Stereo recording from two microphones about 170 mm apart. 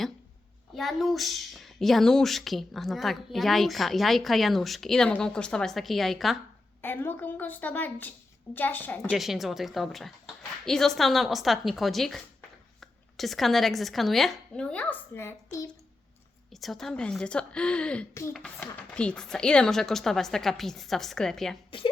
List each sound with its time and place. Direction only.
0.7 s speech: centre (ahead or behind)
6.8 s a woman's voice: 10° left (ahead or behind)
9.0 s speech: centre (ahead or behind)
16.5 s speech: centre (ahead or behind)
18.1 s a woman's voice: 15° left (ahead or behind)
18.3 s speech: centre (ahead or behind)